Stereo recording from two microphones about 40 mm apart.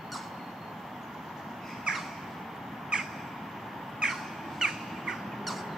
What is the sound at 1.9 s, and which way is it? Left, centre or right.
Squawk, right.